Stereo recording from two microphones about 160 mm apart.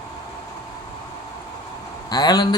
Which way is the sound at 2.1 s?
25° left (ahead or behind).